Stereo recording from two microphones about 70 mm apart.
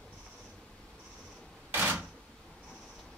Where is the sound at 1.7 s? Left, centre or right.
Right.